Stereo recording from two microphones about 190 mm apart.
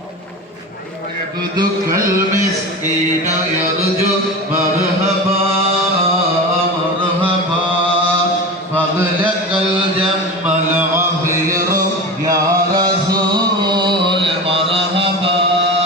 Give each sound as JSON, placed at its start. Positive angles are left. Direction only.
{"t": 10.4, "sound": "a sound", "side_deg": -10}
{"t": 13.1, "sound": "music", "side_deg": -20}
{"t": 14.2, "sound": "mantra", "side_deg": -30}